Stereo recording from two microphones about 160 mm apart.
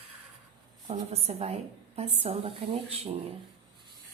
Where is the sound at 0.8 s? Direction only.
40° right (ahead or behind).